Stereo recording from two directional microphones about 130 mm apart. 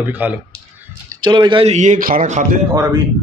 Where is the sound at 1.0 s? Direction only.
35° right (ahead or behind).